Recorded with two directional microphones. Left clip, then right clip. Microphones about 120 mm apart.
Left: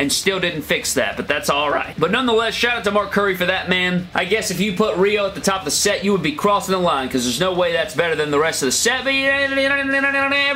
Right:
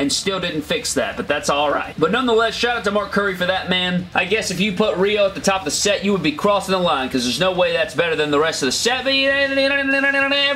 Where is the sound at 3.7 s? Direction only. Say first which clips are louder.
Left 1 dB; 30° left (ahead or behind).